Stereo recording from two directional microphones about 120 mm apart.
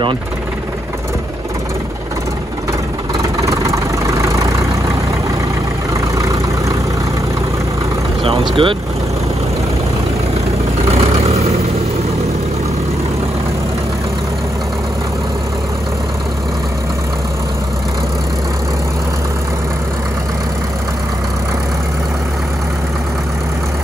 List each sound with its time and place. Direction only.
3.3 s vehicle: 25° right (ahead or behind)
8.2 s vehicle: 45° right (ahead or behind)
10.9 s vehicle: 55° right (ahead or behind)